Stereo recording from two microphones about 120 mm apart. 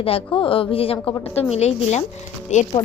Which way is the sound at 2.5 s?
85° left.